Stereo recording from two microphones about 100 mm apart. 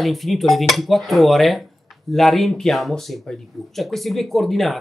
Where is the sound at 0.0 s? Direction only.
Centre (ahead or behind).